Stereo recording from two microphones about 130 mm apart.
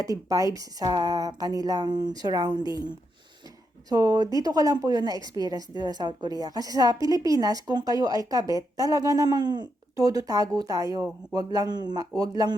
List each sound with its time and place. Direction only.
0.0 s a woman's voice: 25° right (ahead or behind)
3.8 s a woman's voice: 30° right (ahead or behind)